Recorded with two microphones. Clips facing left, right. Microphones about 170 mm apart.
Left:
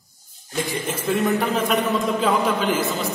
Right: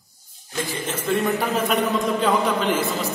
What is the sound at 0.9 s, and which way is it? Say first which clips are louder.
A man's voice: left 1 dB; centre (ahead or behind).